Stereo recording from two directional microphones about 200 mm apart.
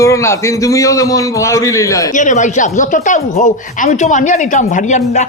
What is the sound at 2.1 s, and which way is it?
Speech, 40° left (ahead or behind).